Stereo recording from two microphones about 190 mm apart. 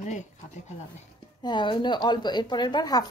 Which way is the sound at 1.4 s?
25° left (ahead or behind).